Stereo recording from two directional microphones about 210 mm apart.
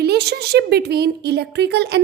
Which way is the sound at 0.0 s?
50° right (ahead or behind).